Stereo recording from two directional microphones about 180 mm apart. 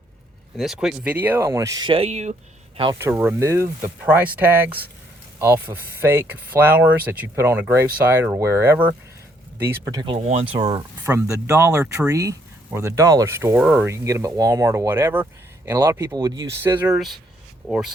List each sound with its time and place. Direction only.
0.5 s speech: centre (ahead or behind); by 2.3 s 35° right (ahead or behind)
2.9 s speech: 10° right (ahead or behind)